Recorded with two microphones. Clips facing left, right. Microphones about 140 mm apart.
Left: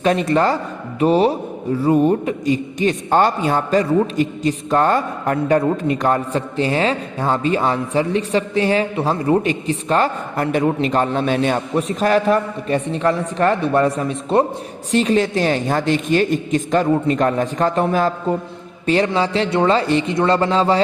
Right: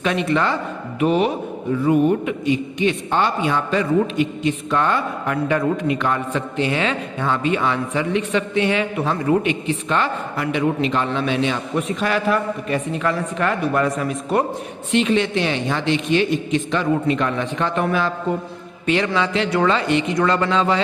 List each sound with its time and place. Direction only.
0.0 s a man's voice: 40° left (ahead or behind)
18.9 s a man's voice: 35° left (ahead or behind)